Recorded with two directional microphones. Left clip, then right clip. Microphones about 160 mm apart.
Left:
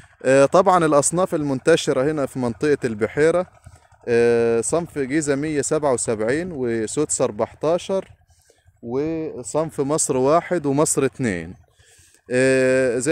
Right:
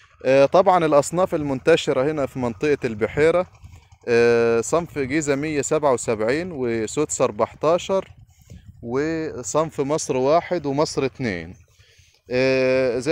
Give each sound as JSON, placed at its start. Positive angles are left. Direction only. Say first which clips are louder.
{"t": 0.2, "sound": "speech", "louder": "left 1 dB", "side_deg": 45}
{"t": 8.8, "sound": "speech", "louder": "even", "side_deg": 10}
{"t": 9.8, "sound": "speech", "louder": "left 1 dB", "side_deg": 40}